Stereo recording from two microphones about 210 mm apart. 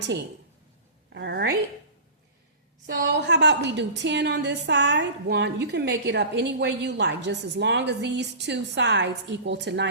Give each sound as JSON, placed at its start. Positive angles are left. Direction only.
{"t": 1.1, "sound": "a woman's voice", "side_deg": -55}
{"t": 2.8, "sound": "a woman's voice", "side_deg": -55}